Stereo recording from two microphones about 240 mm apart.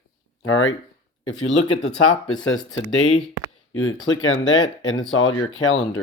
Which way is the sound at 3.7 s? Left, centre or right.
Left.